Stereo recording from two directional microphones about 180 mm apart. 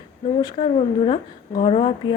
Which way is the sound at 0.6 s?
35° left (ahead or behind).